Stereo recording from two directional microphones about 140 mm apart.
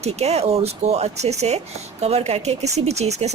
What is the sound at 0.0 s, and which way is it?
Speech, 50° right (ahead or behind).